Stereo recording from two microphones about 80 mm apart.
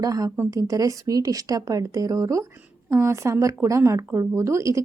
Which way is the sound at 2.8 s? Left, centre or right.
Right.